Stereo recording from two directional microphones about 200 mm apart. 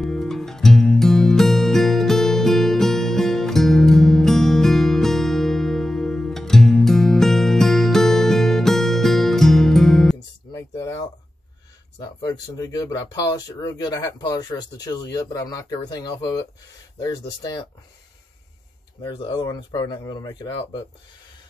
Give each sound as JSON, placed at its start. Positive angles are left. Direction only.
{"t": 0.0, "sound": "music", "side_deg": 0}
{"t": 10.5, "sound": "a sound", "side_deg": 15}
{"t": 12.0, "sound": "speech", "side_deg": 20}
{"t": 19.0, "sound": "speech", "side_deg": 25}